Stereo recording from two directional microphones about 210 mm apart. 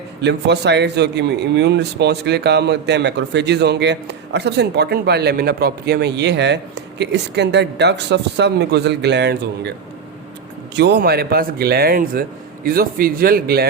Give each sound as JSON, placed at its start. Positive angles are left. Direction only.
{"t": 0.2, "sound": "a man's voice", "side_deg": -55}
{"t": 10.8, "sound": "a man's voice", "side_deg": -55}